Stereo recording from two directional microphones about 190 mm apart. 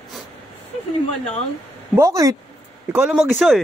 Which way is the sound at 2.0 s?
15° right (ahead or behind).